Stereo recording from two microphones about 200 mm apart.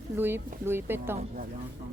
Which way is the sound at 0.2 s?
10° right (ahead or behind).